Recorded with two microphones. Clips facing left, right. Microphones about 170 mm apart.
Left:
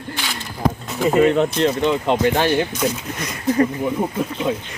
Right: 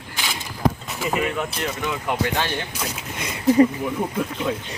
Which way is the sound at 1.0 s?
35° left (ahead or behind).